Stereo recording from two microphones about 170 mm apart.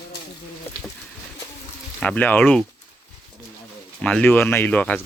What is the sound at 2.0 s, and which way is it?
Speech, 10° left (ahead or behind).